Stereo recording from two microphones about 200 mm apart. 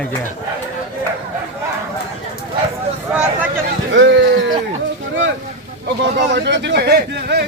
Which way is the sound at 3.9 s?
65° right (ahead or behind).